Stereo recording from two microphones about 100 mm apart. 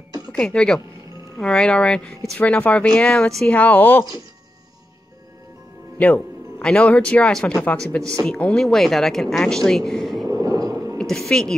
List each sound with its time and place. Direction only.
0.3 s speech: 10° left (ahead or behind)
5.9 s speech: 15° left (ahead or behind)
10.2 s a sound: 35° right (ahead or behind)
11.0 s a woman's voice: 5° left (ahead or behind)